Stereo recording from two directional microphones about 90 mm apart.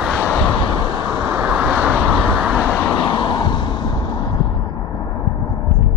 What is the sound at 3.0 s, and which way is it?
Vehicle, 60° left (ahead or behind).